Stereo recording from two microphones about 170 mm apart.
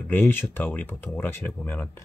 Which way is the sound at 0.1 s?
10° left (ahead or behind).